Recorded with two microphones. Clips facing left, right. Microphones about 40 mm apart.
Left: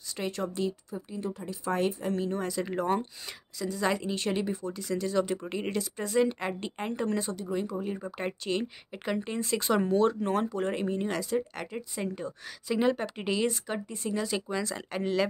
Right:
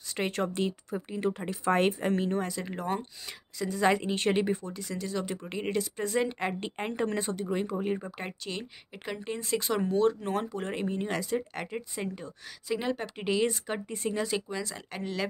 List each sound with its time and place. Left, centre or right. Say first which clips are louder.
0.1 s speech: right 2 dB; right
2.3 s speech: even; centre
2.6 s speech: left 4 dB; centre
3.5 s a woman's voice: right 3 dB; right
4.6 s speech: left 4 dB; centre
5.7 s speech: right 4 dB; centre
7.0 s a woman's voice: right 1 dB; right
8.0 s speech: left 4 dB; centre
12.2 s speech: left 5 dB; centre
13.7 s speech: even; centre
14.5 s speech: left 4 dB; centre